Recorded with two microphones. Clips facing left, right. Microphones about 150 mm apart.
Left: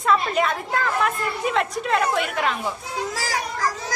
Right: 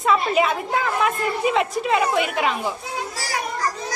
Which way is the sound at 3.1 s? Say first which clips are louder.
Left 2 dB; 90° left.